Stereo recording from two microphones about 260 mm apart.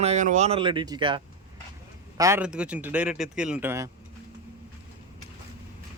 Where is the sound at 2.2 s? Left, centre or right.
Centre.